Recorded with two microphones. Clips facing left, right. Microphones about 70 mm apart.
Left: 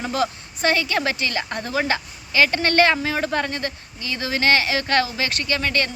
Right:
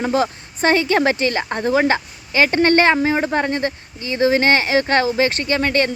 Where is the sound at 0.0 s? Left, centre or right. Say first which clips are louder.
Right 5 dB; right.